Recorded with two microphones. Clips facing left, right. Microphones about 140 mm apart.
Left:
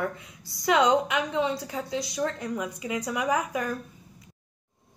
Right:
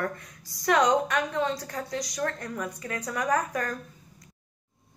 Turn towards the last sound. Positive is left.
turn(degrees=10)  # may be behind; listen again after turning